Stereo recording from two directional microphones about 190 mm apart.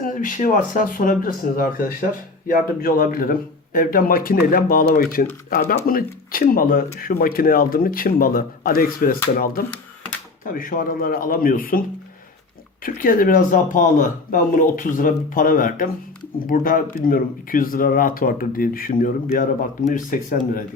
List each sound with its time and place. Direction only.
0.0 s speech: 45° left (ahead or behind)
12.8 s speech: 45° left (ahead or behind)